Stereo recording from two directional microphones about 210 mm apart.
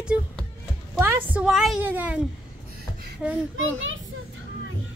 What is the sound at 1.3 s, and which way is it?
Speech, centre (ahead or behind).